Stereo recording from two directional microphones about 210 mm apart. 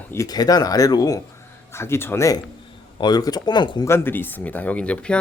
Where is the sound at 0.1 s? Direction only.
15° left (ahead or behind).